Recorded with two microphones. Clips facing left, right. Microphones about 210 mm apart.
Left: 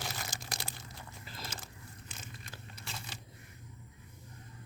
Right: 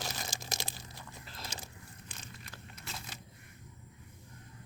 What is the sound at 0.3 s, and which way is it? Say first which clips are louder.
Crumpling: right 2 dB; 25° right (ahead or behind).